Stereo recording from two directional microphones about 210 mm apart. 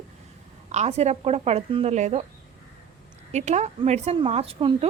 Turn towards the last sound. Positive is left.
turn(degrees=-25)  # may be behind; listen again after turning